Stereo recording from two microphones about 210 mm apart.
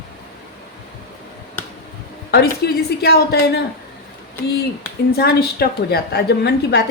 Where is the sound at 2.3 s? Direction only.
50° left (ahead or behind).